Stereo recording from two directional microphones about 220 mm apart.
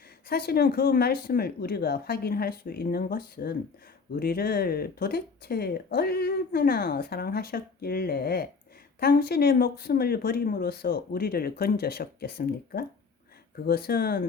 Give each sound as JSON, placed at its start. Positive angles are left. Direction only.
{"t": 0.3, "sound": "speech", "side_deg": 45}